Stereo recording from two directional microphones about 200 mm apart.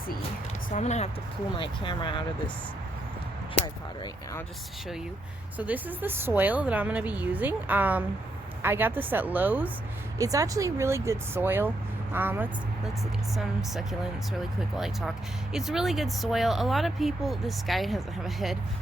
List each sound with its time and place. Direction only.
0.7 s speech: 35° left (ahead or behind)
4.0 s speech: 15° left (ahead or behind)
5.5 s a woman's voice: 10° right (ahead or behind)